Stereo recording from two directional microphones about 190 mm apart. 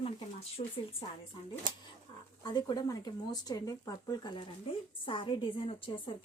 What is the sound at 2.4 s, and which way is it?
A woman's voice, 20° left (ahead or behind).